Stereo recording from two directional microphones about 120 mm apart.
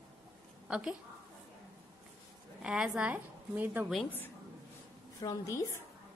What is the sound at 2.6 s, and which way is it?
A woman's voice, 5° right (ahead or behind).